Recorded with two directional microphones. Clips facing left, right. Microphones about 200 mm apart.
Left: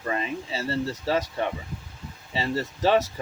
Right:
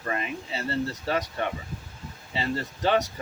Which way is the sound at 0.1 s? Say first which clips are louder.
Left 2 dB; 25° left (ahead or behind).